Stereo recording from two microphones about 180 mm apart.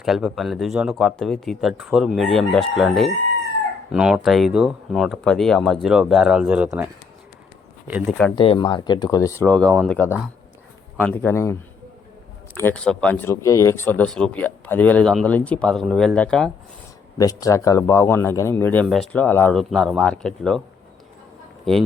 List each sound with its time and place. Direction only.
0.0 s speech: centre (ahead or behind)
8.4 s speech: 25° left (ahead or behind)
12.5 s speech: 10° left (ahead or behind)
17.2 s speech: 20° left (ahead or behind)
21.6 s a man's voice: centre (ahead or behind)